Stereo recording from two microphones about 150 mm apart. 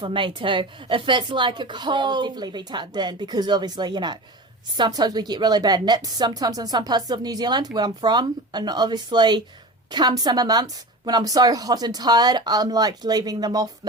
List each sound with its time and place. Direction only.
0.0 s a woman's voice: 35° right (ahead or behind)